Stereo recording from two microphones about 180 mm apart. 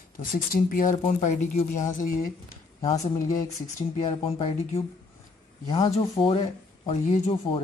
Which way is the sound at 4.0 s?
30° left (ahead or behind).